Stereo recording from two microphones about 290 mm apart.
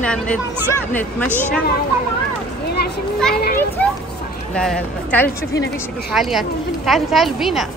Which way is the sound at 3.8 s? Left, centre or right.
Centre.